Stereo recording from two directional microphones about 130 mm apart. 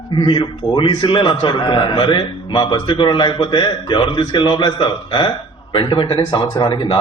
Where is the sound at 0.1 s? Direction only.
35° left (ahead or behind).